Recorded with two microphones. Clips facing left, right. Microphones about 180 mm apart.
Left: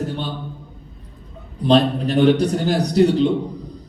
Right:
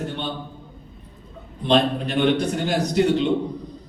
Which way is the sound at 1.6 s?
40° left (ahead or behind).